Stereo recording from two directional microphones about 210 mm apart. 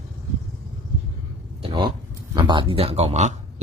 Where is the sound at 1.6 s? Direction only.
20° right (ahead or behind).